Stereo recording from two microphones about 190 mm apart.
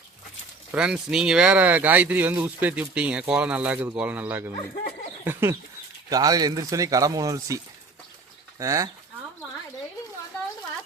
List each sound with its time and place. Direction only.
0.7 s speech: 5° right (ahead or behind)
4.5 s speech: 35° left (ahead or behind)
5.2 s speech: 15° right (ahead or behind)